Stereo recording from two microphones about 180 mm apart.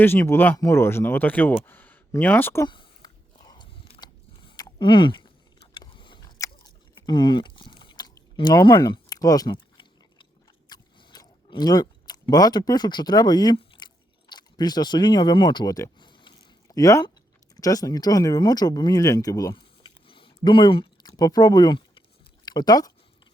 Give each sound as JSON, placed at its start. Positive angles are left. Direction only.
{"t": 0.0, "sound": "speech", "side_deg": 15}
{"t": 2.6, "sound": "biting", "side_deg": 25}
{"t": 10.7, "sound": "chewing", "side_deg": 20}
{"t": 17.5, "sound": "speech", "side_deg": 20}